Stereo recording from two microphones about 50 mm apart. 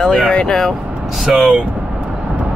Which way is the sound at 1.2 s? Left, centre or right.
Centre.